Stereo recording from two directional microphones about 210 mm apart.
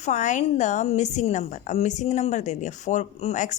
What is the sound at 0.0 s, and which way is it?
A woman's voice, 35° left (ahead or behind).